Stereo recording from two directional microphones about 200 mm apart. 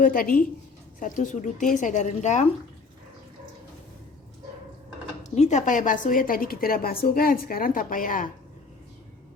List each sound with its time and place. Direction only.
0.0 s a woman's voice: 45° left (ahead or behind)
5.2 s a woman's voice: 35° left (ahead or behind)